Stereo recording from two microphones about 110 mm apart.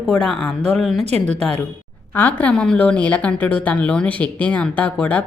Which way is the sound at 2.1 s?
15° left (ahead or behind).